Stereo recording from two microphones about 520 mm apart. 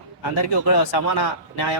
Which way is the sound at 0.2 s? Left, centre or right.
Left.